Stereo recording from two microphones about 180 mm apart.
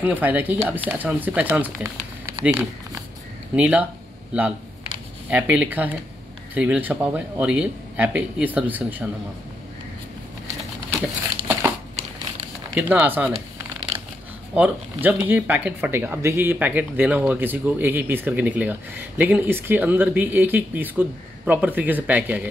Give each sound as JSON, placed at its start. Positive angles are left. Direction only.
{"t": 0.0, "sound": "speech", "side_deg": -10}
{"t": 12.7, "sound": "speech", "side_deg": -10}
{"t": 13.9, "sound": "a sound", "side_deg": -35}
{"t": 14.5, "sound": "speech", "side_deg": -10}